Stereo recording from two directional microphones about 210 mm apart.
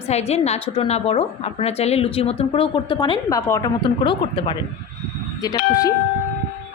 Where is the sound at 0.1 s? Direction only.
30° left (ahead or behind).